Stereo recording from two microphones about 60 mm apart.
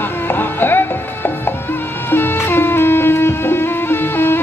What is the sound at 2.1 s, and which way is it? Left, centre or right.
Music, left.